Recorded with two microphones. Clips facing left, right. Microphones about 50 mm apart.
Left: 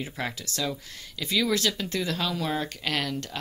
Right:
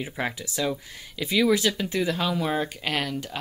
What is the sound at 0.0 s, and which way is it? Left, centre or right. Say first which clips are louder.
Speech: right 3 dB; centre.